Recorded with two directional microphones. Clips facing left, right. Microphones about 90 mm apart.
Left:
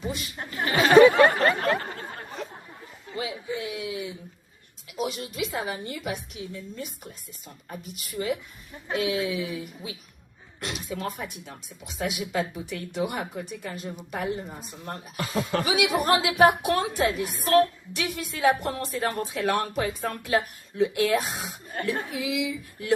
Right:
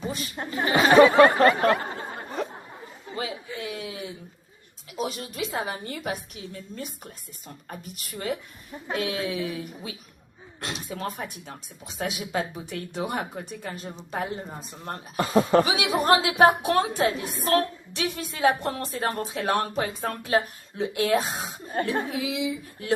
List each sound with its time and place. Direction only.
0.3 s speech: 25° right (ahead or behind)
3.8 s a sound: 45° right (ahead or behind)
5.0 s a woman's voice: 40° right (ahead or behind)
10.6 s speech: 30° right (ahead or behind)